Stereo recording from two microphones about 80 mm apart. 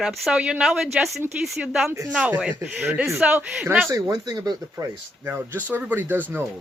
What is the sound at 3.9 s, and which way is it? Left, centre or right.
Speech, right.